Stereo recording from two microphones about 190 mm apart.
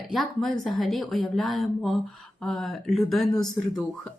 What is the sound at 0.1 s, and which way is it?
A woman's voice, centre (ahead or behind).